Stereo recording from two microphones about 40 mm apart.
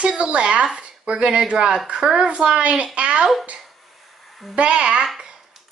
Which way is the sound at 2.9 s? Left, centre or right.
Right.